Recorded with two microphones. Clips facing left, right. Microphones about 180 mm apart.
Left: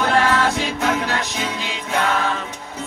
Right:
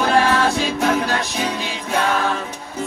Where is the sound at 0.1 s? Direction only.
30° right (ahead or behind).